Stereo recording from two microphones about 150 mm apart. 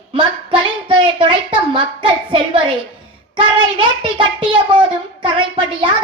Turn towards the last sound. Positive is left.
turn(degrees=-30)  # may be behind; listen again after turning